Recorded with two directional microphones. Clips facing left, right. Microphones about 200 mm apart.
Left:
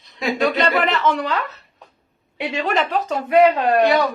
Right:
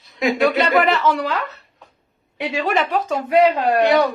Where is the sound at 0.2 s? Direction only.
10° right (ahead or behind).